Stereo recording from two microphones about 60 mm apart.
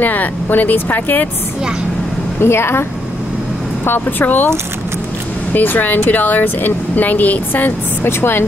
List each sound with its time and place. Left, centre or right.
0.0 s speech: left
2.4 s a woman's voice: left
5.5 s speech: left